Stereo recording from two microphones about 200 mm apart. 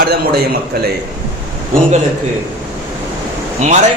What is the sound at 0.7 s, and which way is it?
Speech, 50° right (ahead or behind).